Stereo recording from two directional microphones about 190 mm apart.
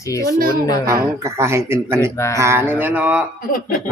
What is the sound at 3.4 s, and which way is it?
Speech, 50° left (ahead or behind).